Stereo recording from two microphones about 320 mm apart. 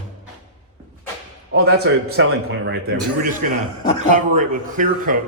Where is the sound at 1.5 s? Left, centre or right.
Right.